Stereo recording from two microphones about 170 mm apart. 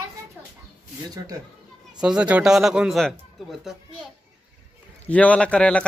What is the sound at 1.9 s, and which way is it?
A man's voice, 5° right (ahead or behind).